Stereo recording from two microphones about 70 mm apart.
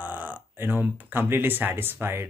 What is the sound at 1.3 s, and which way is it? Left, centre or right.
Speech, right.